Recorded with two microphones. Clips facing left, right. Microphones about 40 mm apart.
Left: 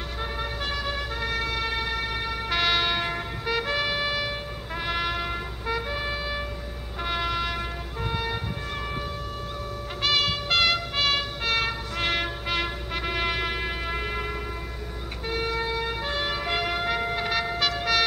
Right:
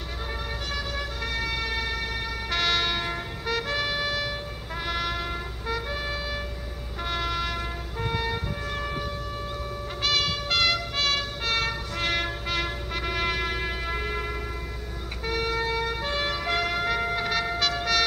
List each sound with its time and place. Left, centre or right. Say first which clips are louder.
1.2 s emergency vehicle: left 2 dB; centre
2.5 s music: left 1 dB; centre
10.0 s vehicle: left 2 dB; centre
15.8 s emergency vehicle: even; centre